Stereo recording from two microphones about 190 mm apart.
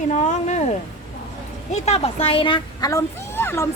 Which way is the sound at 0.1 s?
40° left (ahead or behind).